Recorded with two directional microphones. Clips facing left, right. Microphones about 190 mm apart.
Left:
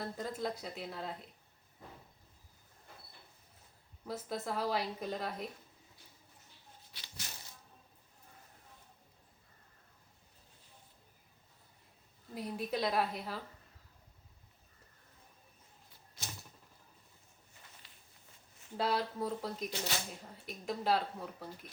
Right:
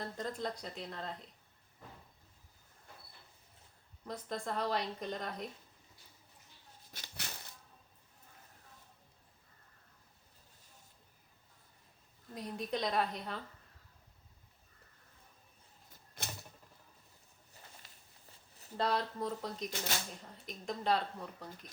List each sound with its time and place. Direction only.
0.0 s speech: 5° left (ahead or behind)
4.0 s speech: 5° left (ahead or behind)
6.9 s speech: 45° right (ahead or behind)
12.3 s speech: 5° left (ahead or behind)
16.2 s typewriter: 55° right (ahead or behind)
18.8 s speech: 5° left (ahead or behind)